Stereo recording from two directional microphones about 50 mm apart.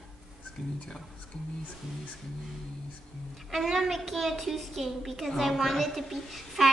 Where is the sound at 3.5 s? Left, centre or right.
Centre.